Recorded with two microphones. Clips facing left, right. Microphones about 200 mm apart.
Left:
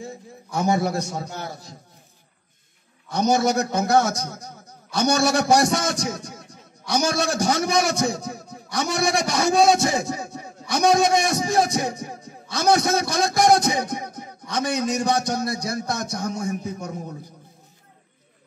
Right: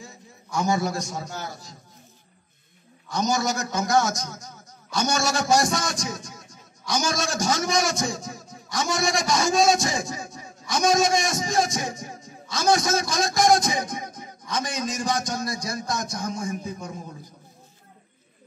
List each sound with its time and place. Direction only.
0.0 s a man's voice: 60° left (ahead or behind)
3.1 s a man's voice: 60° left (ahead or behind)